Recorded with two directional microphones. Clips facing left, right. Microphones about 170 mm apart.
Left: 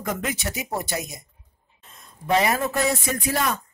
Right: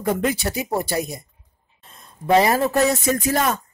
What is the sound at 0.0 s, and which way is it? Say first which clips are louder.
Speech: right 7 dB; 30° right (ahead or behind).